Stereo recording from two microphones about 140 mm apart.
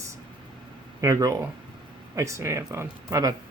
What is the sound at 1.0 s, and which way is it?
Speech, 25° right (ahead or behind).